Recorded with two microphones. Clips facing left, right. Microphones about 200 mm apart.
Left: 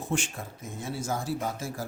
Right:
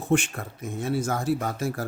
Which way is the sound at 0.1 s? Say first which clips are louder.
Right 9 dB; 65° right (ahead or behind).